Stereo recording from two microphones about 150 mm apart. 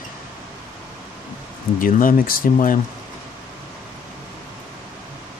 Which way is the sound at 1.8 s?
65° left (ahead or behind).